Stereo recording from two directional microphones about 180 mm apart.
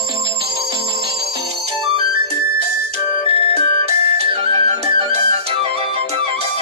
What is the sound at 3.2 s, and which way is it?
Music, 30° left (ahead or behind).